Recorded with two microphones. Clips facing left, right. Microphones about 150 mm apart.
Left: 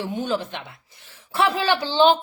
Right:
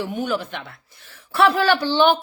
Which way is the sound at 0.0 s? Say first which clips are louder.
Right 1 dB; 25° left (ahead or behind).